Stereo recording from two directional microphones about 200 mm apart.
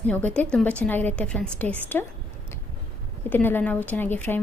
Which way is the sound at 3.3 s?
10° left (ahead or behind).